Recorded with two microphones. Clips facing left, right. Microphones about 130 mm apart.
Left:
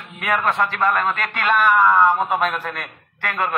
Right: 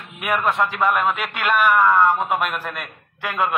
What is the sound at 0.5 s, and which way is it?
A man's voice, 15° right (ahead or behind).